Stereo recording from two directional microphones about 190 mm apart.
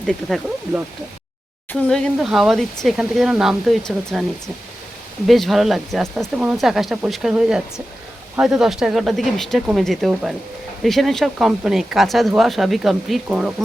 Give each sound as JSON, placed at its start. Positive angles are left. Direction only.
{"t": 0.0, "sound": "speech", "side_deg": 0}